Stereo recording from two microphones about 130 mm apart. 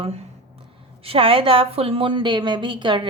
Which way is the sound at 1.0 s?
45° right (ahead or behind).